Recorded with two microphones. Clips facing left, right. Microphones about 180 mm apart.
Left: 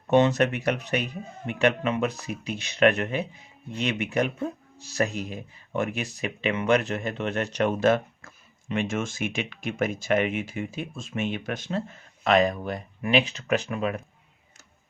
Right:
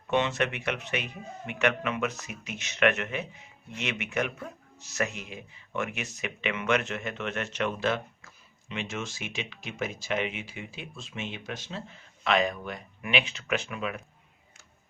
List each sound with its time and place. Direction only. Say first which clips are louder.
0.1 s speech: left 7 dB; 40° left (ahead or behind)